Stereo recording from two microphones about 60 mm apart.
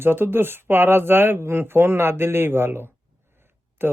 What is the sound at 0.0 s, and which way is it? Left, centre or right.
Speech, right.